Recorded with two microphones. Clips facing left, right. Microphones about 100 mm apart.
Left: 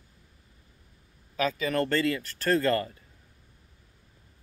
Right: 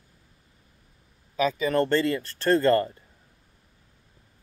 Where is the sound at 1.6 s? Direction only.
30° right (ahead or behind).